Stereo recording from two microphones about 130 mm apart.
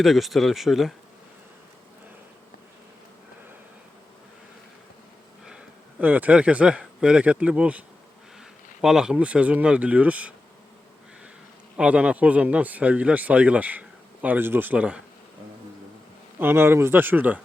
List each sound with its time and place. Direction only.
0.0 s speech: centre (ahead or behind)
5.5 s speech: 10° right (ahead or behind)
11.8 s speech: 10° right (ahead or behind)
16.4 s speech: 15° right (ahead or behind)